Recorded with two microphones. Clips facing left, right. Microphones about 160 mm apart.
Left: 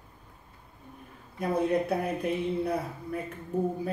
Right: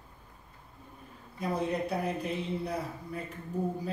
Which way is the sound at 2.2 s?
55° left (ahead or behind).